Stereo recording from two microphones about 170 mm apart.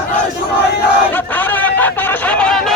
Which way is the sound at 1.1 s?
10° left (ahead or behind).